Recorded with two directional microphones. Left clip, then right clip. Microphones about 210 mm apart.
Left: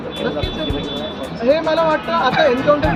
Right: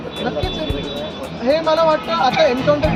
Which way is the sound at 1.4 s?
Centre (ahead or behind).